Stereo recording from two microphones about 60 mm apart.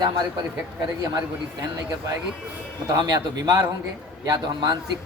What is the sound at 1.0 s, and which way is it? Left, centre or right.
A man's voice, right.